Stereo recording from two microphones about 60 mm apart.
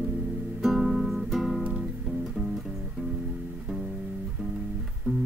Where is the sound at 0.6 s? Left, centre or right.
Centre.